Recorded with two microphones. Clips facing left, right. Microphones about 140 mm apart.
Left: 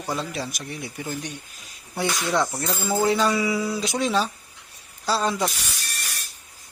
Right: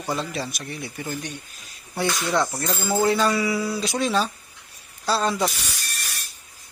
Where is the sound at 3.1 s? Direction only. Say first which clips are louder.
Even; 15° left (ahead or behind).